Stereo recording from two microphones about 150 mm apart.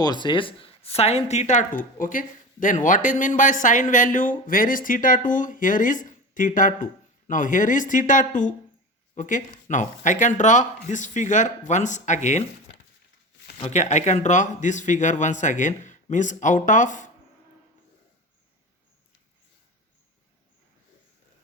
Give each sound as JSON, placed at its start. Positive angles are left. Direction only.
{"t": 0.0, "sound": "a woman's voice", "side_deg": 30}
{"t": 13.7, "sound": "a woman's voice", "side_deg": 50}